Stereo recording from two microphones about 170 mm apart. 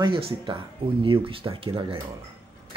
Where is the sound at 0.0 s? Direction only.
30° right (ahead or behind).